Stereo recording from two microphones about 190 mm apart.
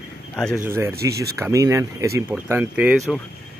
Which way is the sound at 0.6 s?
15° right (ahead or behind).